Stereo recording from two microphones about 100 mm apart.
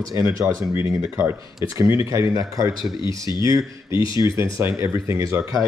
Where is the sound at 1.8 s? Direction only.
30° right (ahead or behind).